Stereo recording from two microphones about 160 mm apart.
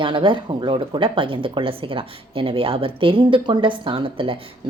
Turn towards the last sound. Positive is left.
turn(degrees=-35)  # may be behind; listen again after turning